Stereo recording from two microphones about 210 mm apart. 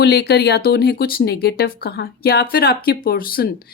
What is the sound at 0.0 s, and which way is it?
Speech, 50° left (ahead or behind).